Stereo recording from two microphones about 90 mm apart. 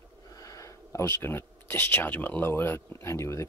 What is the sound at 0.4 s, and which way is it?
Speech, 40° left (ahead or behind).